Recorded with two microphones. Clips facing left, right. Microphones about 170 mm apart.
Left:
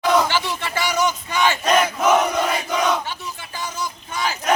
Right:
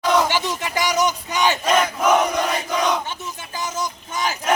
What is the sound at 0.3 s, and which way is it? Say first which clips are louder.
Battle cry: right 1 dB; 15° right (ahead or behind).